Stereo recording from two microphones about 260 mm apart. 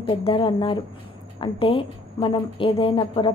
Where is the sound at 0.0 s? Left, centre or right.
Centre.